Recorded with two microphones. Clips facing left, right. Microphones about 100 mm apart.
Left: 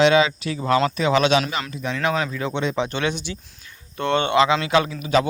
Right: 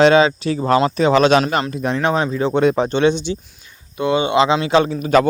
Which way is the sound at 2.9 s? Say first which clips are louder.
Right 9 dB; 25° right (ahead or behind).